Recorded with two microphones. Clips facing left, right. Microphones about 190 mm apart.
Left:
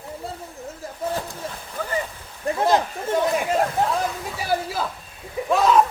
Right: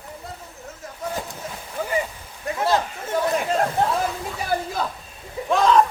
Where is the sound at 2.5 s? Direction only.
30° left (ahead or behind).